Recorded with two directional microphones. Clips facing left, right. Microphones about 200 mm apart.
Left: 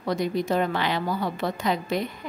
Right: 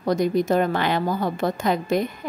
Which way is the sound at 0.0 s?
45° right (ahead or behind).